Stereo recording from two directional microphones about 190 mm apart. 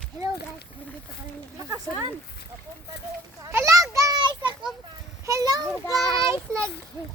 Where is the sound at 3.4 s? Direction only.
15° right (ahead or behind).